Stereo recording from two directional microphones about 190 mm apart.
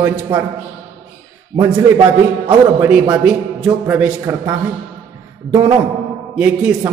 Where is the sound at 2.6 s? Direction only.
10° right (ahead or behind).